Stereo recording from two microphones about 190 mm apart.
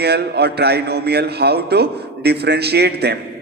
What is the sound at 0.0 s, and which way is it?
A man's voice, 60° right (ahead or behind).